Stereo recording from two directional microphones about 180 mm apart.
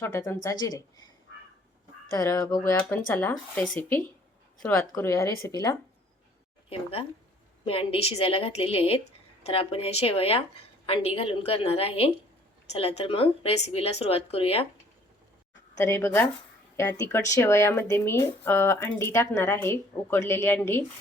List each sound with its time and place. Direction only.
0.0 s a woman's voice: 15° left (ahead or behind)
2.1 s a woman's voice: 20° left (ahead or behind)
7.6 s speech: 30° left (ahead or behind)
15.8 s speech: 15° left (ahead or behind)